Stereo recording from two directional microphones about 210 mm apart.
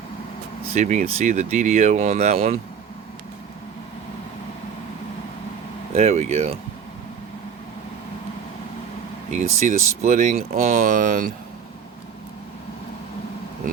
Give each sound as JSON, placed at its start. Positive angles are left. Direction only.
{"t": 0.7, "sound": "speech", "side_deg": -35}
{"t": 5.9, "sound": "speech", "side_deg": -30}
{"t": 9.3, "sound": "speech", "side_deg": -35}